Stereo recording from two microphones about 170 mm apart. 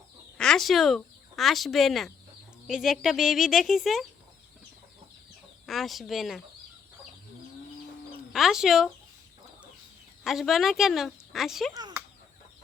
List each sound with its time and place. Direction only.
0.3 s a woman's voice: 5° left (ahead or behind)
5.6 s a woman's voice: centre (ahead or behind)
8.3 s a woman's voice: centre (ahead or behind)
10.2 s a woman's voice: centre (ahead or behind)
11.7 s a sound: 20° right (ahead or behind)